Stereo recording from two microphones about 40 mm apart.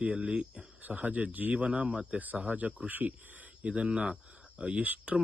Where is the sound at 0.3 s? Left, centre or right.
Right.